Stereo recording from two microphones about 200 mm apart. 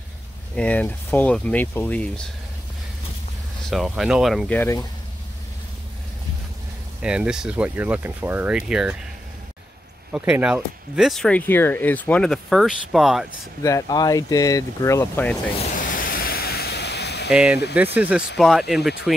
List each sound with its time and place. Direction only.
0.6 s speech: 10° left (ahead or behind)
3.7 s speech: centre (ahead or behind)
4.6 s speech: 15° left (ahead or behind)
7.0 s speech: 5° right (ahead or behind)
10.1 s speech: 5° right (ahead or behind)
13.6 s speech: 15° left (ahead or behind)
15.6 s ocean: 40° left (ahead or behind); by 17.3 s 55° left (ahead or behind)
17.3 s speech: 5° right (ahead or behind)